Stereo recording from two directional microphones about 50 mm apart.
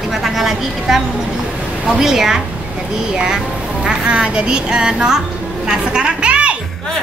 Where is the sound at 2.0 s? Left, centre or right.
Centre.